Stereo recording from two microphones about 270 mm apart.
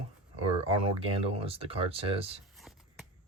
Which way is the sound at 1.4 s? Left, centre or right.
Right.